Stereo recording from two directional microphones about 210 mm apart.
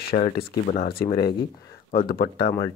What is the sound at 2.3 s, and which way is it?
Speech, 25° left (ahead or behind).